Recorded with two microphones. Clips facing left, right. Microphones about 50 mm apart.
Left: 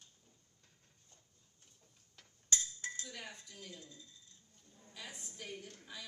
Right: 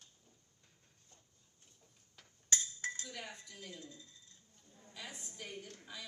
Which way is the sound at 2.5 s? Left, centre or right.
Right.